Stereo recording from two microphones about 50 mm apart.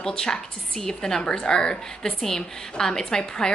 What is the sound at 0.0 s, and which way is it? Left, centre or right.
A woman's voice, centre.